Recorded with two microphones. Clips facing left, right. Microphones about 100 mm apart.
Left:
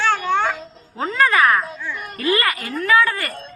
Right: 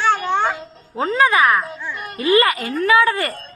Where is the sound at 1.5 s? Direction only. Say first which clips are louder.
Even; 5° right (ahead or behind).